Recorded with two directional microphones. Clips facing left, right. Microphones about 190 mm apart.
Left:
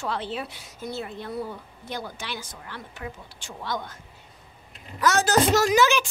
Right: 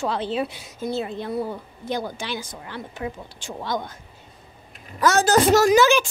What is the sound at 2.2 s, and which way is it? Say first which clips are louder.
Speech: right 5 dB; 20° right (ahead or behind).